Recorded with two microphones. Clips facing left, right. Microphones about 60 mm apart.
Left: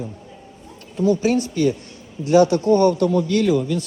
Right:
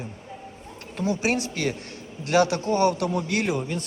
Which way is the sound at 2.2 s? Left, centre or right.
Right.